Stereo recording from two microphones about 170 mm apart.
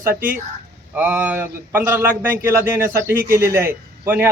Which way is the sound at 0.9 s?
10° right (ahead or behind).